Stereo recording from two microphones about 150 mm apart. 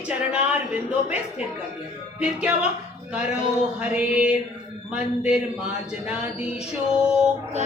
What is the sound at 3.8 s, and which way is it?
A woman's voice, 5° right (ahead or behind).